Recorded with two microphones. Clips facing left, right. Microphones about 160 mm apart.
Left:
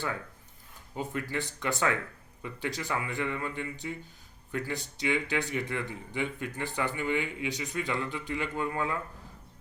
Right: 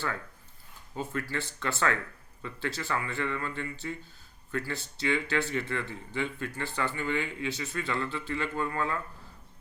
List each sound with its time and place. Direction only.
0.9 s speech: 15° left (ahead or behind)